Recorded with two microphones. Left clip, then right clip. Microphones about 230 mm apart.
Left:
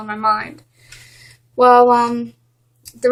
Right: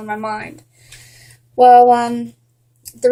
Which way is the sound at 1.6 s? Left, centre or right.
Left.